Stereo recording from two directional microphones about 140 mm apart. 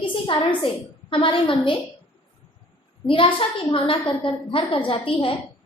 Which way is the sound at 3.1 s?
40° left (ahead or behind).